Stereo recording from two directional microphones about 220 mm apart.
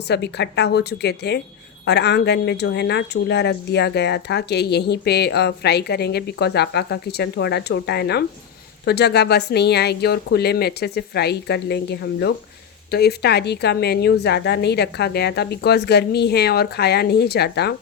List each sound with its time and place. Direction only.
0.1 s speech: 50° left (ahead or behind)